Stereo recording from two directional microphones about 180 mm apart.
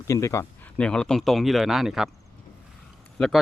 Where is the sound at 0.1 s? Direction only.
15° left (ahead or behind).